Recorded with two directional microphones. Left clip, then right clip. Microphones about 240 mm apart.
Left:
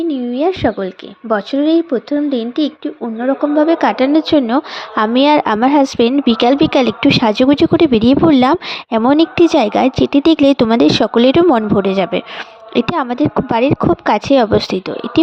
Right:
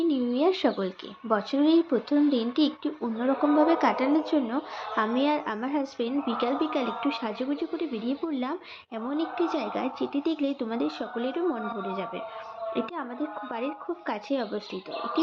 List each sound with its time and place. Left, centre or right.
0.1 s speech: left